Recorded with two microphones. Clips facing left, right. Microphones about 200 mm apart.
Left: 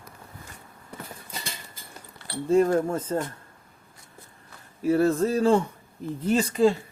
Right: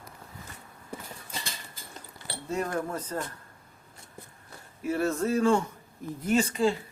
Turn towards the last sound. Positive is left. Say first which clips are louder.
# left 4 dB
turn(degrees=35)  # may be behind; listen again after turning